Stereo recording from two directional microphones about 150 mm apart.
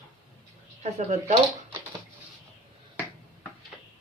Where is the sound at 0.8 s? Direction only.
50° right (ahead or behind).